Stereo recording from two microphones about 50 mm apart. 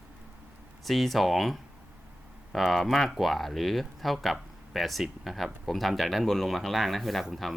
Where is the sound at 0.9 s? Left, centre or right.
Centre.